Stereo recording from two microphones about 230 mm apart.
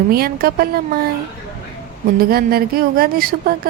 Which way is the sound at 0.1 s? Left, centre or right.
Right.